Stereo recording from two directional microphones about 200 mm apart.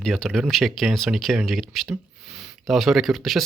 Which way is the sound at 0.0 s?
Centre (ahead or behind).